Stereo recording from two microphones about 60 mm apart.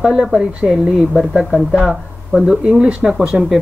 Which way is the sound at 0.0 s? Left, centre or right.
Centre.